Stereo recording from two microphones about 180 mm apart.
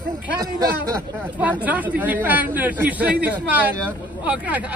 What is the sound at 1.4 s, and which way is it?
A man's voice, 10° right (ahead or behind).